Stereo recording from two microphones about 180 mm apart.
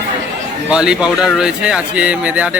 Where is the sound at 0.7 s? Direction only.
5° right (ahead or behind).